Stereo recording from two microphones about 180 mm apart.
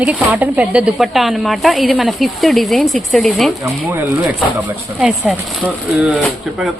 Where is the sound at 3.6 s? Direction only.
10° right (ahead or behind).